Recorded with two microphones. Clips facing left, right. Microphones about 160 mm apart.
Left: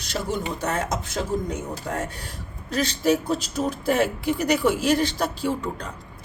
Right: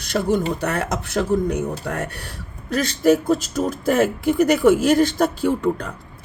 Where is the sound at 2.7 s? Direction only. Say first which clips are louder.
Right 5 dB; 50° right (ahead or behind).